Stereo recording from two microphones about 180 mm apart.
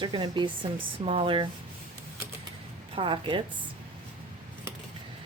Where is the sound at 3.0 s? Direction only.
30° right (ahead or behind).